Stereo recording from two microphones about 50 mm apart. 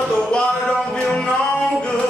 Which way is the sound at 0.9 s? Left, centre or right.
Centre.